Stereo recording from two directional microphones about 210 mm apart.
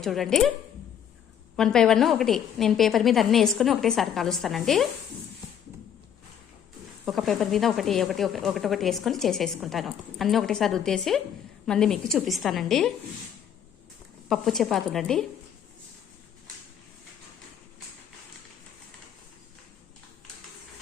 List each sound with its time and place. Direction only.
0.0 s speech: centre (ahead or behind)
1.5 s speech: 5° left (ahead or behind)
7.0 s speech: centre (ahead or behind)
14.3 s speech: centre (ahead or behind)